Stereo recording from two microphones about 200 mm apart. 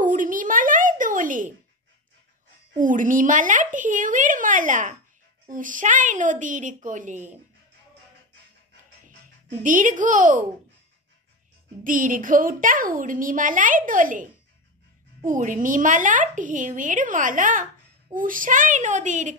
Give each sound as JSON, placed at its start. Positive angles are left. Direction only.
{"t": 0.0, "sound": "a sound", "side_deg": -40}
{"t": 2.7, "sound": "a woman's voice", "side_deg": -40}
{"t": 9.6, "sound": "a woman's voice", "side_deg": -40}
{"t": 11.8, "sound": "a child's voice", "side_deg": -45}